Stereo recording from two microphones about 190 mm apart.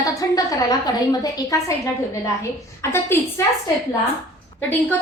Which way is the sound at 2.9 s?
15° left (ahead or behind).